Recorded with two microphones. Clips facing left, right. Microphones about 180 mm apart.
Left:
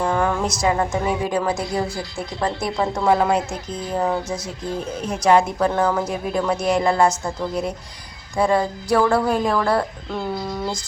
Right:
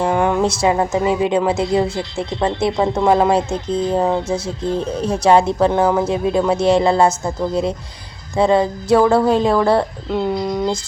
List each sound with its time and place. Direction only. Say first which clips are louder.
0.0 s speech: right 4 dB; 20° right (ahead or behind)